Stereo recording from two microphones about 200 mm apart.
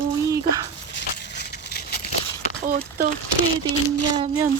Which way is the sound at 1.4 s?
55° left (ahead or behind).